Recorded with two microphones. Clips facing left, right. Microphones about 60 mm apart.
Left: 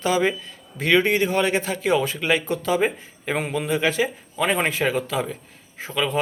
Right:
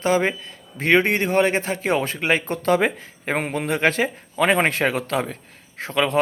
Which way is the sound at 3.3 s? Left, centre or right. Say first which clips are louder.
Right 1 dB; right.